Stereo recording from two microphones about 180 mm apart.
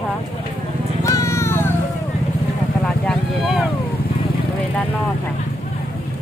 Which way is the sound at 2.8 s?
Centre (ahead or behind).